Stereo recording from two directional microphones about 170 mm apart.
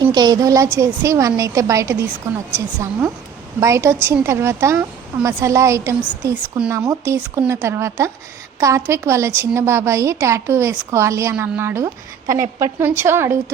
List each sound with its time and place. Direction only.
0.0 s a woman's voice: 25° right (ahead or behind)